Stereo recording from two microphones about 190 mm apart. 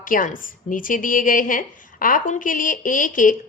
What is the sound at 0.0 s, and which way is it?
A woman's voice, 45° left (ahead or behind).